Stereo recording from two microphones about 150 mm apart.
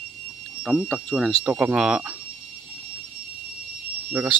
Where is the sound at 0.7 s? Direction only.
Centre (ahead or behind).